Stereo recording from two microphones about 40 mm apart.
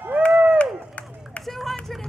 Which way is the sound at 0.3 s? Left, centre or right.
Right.